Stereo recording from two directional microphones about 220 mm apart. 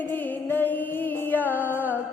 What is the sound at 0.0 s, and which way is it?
Music, 10° left (ahead or behind).